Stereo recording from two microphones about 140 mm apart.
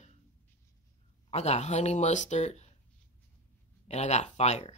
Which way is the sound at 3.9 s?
55° left (ahead or behind).